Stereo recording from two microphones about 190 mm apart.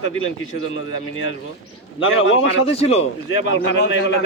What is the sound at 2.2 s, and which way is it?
Speech, 90° left.